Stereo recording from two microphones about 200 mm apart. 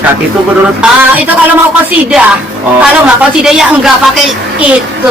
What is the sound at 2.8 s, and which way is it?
Speech, 5° right (ahead or behind).